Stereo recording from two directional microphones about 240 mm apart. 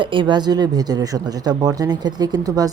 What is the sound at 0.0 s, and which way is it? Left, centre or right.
Speech, centre.